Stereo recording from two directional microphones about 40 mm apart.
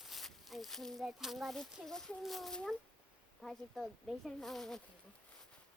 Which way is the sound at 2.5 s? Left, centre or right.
Centre.